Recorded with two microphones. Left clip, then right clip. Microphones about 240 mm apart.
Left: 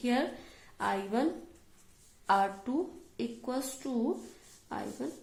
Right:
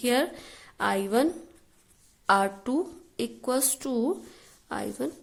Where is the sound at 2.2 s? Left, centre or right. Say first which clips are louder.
Right 5 dB; right.